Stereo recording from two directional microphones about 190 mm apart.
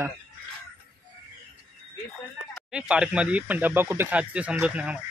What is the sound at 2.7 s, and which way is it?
Speech, 5° right (ahead or behind).